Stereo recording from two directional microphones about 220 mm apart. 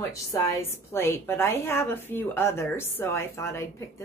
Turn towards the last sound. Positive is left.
turn(degrees=10)  # may be behind; listen again after turning